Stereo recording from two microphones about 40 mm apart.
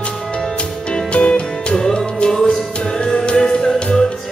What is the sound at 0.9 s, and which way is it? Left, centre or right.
Music, left.